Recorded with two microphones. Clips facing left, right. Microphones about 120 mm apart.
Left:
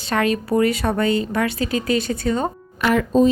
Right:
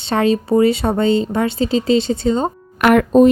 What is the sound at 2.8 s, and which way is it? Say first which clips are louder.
Speech: right 6 dB; 60° right (ahead or behind).